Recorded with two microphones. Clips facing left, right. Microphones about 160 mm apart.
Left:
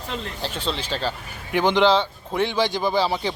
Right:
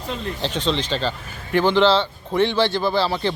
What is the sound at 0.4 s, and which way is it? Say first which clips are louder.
Speech: right 6 dB; 5° left (ahead or behind).